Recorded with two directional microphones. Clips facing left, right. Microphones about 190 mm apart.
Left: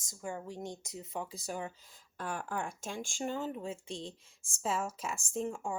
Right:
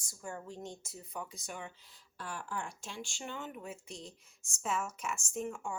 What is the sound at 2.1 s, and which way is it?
Speech, 50° left (ahead or behind).